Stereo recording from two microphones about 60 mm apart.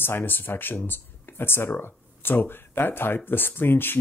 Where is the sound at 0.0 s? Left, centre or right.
Left.